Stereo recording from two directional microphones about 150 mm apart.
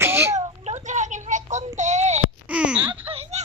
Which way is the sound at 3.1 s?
40° right (ahead or behind).